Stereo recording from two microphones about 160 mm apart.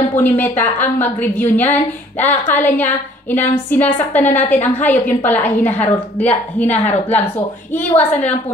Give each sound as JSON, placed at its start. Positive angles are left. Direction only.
{"t": 0.1, "sound": "a woman's voice", "side_deg": 10}